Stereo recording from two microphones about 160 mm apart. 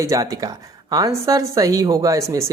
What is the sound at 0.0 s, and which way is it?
Speech, 20° right (ahead or behind).